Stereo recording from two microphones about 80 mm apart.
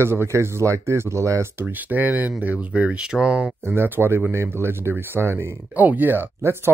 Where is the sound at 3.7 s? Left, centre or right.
Right.